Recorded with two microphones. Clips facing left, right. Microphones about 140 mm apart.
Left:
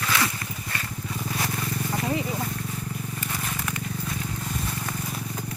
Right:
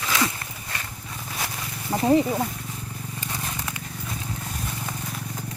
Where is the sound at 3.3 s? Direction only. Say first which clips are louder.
Even; 15° right (ahead or behind).